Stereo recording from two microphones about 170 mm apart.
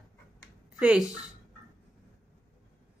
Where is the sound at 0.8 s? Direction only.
5° right (ahead or behind).